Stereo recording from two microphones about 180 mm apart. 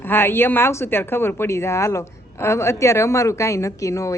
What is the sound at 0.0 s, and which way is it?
Speech, 10° left (ahead or behind).